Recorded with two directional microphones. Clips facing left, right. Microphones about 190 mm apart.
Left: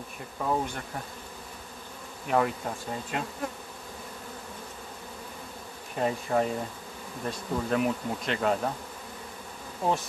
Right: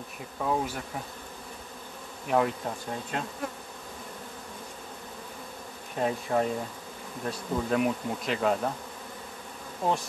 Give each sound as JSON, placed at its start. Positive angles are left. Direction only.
{"t": 0.4, "sound": "bee", "side_deg": -5}
{"t": 2.2, "sound": "bee", "side_deg": 0}
{"t": 5.9, "sound": "bee", "side_deg": 0}
{"t": 9.8, "sound": "bee", "side_deg": 0}